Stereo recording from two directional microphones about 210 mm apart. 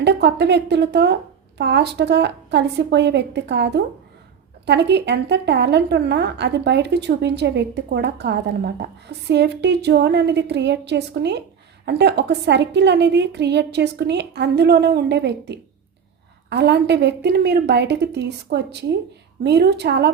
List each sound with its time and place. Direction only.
0.0 s a woman's voice: 55° right (ahead or behind)